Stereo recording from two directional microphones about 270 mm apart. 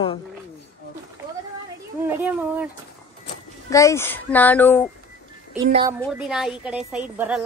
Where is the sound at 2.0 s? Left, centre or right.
Centre.